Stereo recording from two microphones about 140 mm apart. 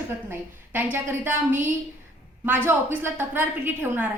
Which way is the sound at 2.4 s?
15° right (ahead or behind).